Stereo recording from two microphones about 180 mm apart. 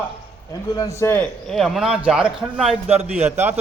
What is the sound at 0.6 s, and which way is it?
A man's voice, 20° left (ahead or behind).